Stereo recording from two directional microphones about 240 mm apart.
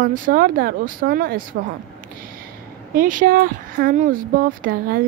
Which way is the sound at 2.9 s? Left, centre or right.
Right.